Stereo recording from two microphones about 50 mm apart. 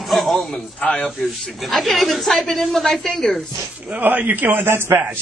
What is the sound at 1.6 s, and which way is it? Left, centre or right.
A woman's voice, centre.